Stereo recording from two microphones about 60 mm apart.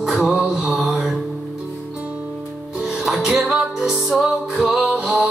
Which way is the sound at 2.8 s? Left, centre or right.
Centre.